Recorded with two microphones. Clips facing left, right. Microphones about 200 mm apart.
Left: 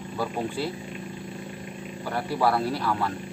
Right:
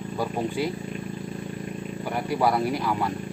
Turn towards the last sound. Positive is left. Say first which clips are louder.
# right 1 dB
turn(degrees=-15)  # may be behind; listen again after turning